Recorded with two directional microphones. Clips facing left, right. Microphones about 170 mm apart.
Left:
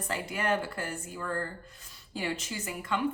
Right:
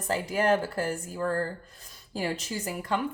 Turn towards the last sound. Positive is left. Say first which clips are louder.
# right 3 dB
turn(degrees=-40)  # may be behind; listen again after turning